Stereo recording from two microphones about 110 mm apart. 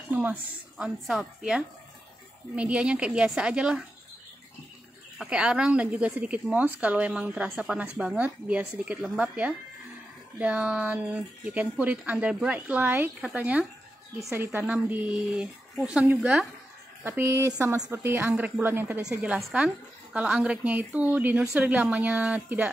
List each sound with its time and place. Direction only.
0.1 s a woman's voice: 15° right (ahead or behind)
0.8 s a woman's voice: 5° right (ahead or behind)
5.2 s a woman's voice: 10° right (ahead or behind)
17.0 s a woman's voice: 20° right (ahead or behind)